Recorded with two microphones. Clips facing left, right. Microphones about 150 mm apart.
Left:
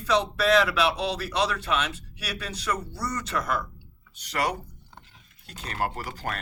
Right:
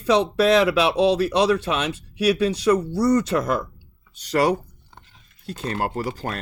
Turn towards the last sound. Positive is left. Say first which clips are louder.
# right 6 dB
turn(degrees=-30)  # may be behind; listen again after turning